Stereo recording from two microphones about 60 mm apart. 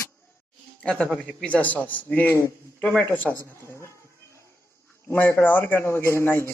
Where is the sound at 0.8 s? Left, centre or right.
Centre.